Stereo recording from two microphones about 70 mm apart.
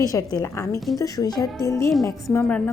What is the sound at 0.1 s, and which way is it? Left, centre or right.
Speech, left.